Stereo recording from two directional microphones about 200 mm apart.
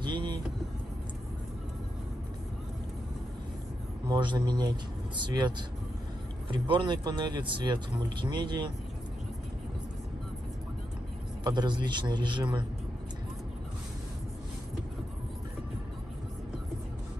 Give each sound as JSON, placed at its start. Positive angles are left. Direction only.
{"t": 0.0, "sound": "vehicle", "side_deg": -20}
{"t": 4.1, "sound": "speech", "side_deg": -25}
{"t": 6.5, "sound": "speech", "side_deg": -25}
{"t": 11.4, "sound": "speech", "side_deg": -20}